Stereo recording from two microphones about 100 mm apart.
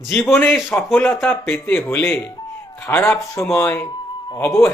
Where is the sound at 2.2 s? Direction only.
35° left (ahead or behind).